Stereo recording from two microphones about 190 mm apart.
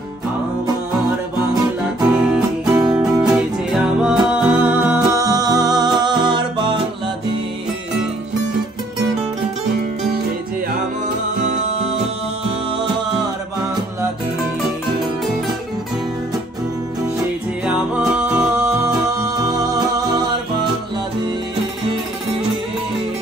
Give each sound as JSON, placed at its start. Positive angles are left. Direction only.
{"t": 2.0, "sound": "music", "side_deg": -5}
{"t": 17.6, "sound": "music", "side_deg": -5}